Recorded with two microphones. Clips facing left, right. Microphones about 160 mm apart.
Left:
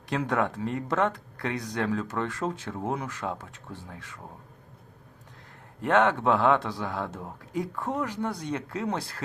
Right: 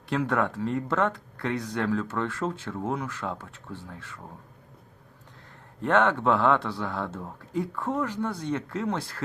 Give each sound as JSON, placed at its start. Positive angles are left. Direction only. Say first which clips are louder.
{"t": 0.1, "sound": "speech", "louder": "right 1 dB", "side_deg": 15}
{"t": 5.8, "sound": "speech", "louder": "even", "side_deg": 15}